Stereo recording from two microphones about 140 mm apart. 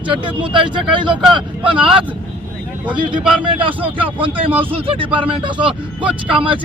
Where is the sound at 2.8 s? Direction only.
35° right (ahead or behind).